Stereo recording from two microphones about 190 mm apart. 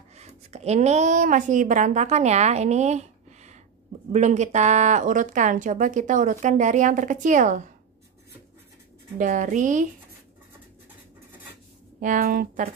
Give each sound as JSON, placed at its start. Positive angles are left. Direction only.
{"t": 0.1, "sound": "speech", "side_deg": -35}
{"t": 9.2, "sound": "speech", "side_deg": -40}
{"t": 12.0, "sound": "speech", "side_deg": -45}